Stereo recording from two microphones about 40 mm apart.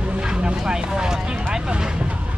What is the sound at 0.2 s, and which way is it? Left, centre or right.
Vehicle, right.